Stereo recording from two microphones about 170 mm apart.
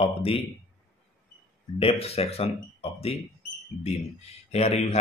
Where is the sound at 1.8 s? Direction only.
35° left (ahead or behind).